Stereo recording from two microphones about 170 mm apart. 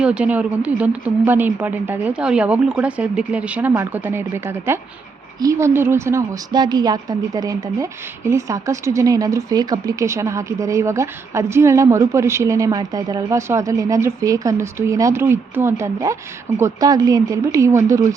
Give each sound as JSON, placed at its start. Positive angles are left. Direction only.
{"t": 0.0, "sound": "a woman's voice", "side_deg": -5}